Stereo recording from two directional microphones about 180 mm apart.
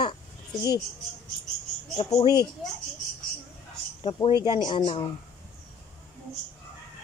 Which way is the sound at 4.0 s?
25° left (ahead or behind).